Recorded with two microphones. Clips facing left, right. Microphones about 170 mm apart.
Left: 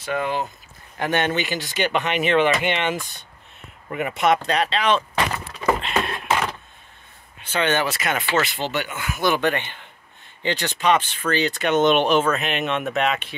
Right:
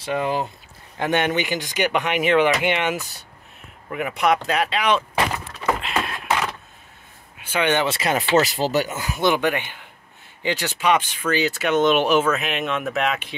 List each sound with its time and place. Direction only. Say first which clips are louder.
0.0 s speech: right 1 dB; 30° right (ahead or behind)
0.9 s speech: right 1 dB; 20° right (ahead or behind)
5.8 s a sound: left 1 dB; 5° right (ahead or behind)
7.3 s speech: right 1 dB; 10° right (ahead or behind); by 9.2 s 35° right (ahead or behind)
9.2 s speech: right 1 dB; 15° right (ahead or behind)